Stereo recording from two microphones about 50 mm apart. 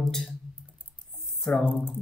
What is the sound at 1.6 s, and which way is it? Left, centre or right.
Speech, left.